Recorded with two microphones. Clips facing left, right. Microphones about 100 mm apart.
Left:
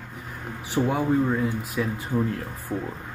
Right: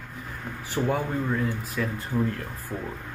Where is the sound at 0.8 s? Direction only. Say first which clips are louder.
Left 4 dB; 20° left (ahead or behind).